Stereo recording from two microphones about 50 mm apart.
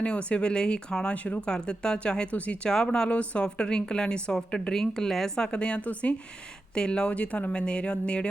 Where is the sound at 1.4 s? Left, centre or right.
Centre.